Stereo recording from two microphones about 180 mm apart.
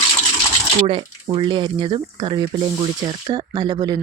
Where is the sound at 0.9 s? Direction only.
30° right (ahead or behind).